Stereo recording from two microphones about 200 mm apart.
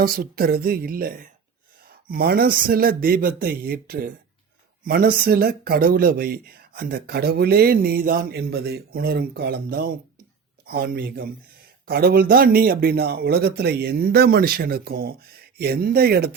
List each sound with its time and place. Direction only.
0.0 s speech: 50° right (ahead or behind)